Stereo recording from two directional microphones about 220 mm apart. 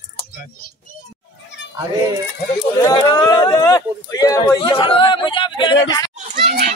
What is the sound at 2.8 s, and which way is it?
Speech, 20° left (ahead or behind).